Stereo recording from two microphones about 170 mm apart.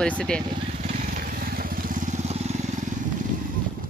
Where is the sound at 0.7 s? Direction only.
45° right (ahead or behind).